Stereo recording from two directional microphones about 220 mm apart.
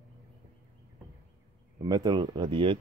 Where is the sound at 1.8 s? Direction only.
20° right (ahead or behind).